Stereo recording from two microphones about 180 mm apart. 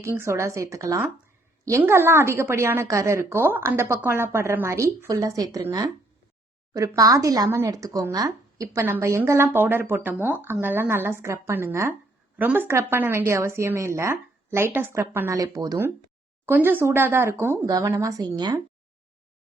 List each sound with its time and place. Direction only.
0.0 s speech: 15° right (ahead or behind)